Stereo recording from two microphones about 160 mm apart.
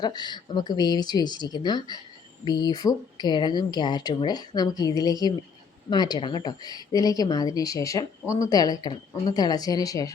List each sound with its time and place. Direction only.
0.0 s speech: 25° left (ahead or behind)